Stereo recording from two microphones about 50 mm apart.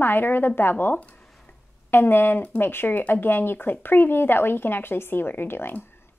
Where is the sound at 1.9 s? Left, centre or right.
Left.